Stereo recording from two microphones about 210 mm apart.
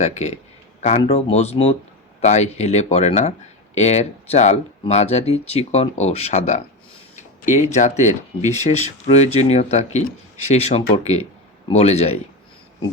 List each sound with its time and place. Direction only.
0.0 s speech: 30° left (ahead or behind)